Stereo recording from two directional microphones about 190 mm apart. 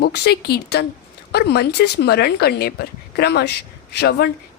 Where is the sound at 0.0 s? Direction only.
55° left (ahead or behind).